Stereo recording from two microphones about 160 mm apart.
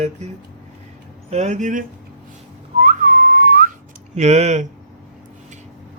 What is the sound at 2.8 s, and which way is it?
Whistling, 60° right (ahead or behind).